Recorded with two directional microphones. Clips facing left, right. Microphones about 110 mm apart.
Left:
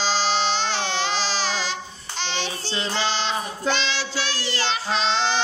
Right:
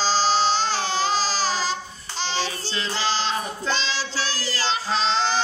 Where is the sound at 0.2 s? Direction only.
40° right (ahead or behind).